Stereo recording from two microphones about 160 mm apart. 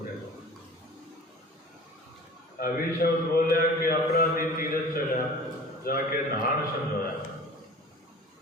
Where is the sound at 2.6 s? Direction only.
70° left (ahead or behind).